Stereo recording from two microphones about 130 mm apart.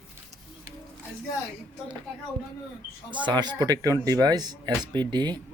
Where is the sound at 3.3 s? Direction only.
35° right (ahead or behind).